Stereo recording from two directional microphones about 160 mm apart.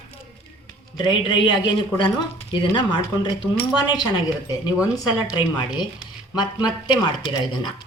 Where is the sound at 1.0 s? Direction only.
30° left (ahead or behind).